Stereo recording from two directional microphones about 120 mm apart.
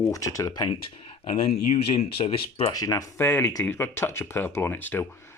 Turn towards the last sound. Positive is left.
turn(degrees=15)  # may be behind; listen again after turning